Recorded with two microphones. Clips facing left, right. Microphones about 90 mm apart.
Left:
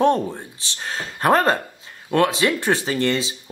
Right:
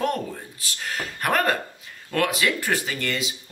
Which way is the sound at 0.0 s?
30° left (ahead or behind).